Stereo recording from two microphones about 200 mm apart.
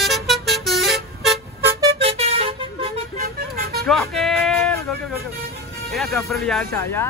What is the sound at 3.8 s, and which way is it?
Music, centre (ahead or behind).